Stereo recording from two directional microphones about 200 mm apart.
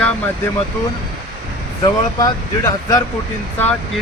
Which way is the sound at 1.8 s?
20° left (ahead or behind).